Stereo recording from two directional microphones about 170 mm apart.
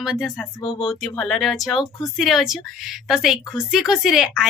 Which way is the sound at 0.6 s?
30° left (ahead or behind).